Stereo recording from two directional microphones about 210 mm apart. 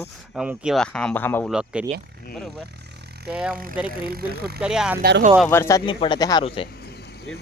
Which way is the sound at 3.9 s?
45° right (ahead or behind).